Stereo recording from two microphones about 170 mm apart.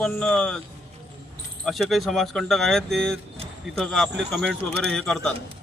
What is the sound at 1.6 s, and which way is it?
A man's voice, centre (ahead or behind).